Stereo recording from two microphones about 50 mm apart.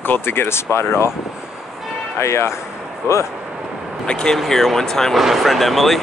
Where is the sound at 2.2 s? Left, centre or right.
Left.